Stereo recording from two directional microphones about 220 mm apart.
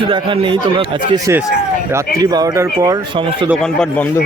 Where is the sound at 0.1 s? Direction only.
20° right (ahead or behind).